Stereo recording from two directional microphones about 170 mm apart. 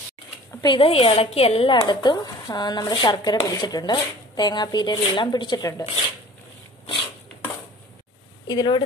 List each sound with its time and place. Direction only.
0.5 s speech: 20° left (ahead or behind)
0.7 s a woman's voice: 35° left (ahead or behind)
8.5 s a woman's voice: 25° left (ahead or behind)